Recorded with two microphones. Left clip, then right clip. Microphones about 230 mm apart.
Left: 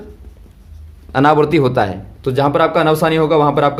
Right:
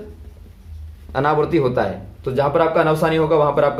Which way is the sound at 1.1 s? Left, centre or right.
Left.